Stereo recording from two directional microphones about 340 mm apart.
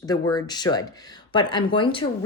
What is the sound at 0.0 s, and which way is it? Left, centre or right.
Speech, centre.